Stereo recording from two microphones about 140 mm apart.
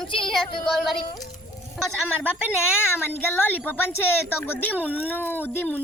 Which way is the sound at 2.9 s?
15° left (ahead or behind).